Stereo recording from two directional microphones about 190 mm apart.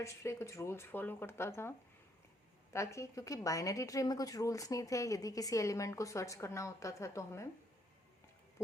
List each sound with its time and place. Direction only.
0.0 s a woman's voice: 15° left (ahead or behind)
2.7 s a woman's voice: 15° left (ahead or behind)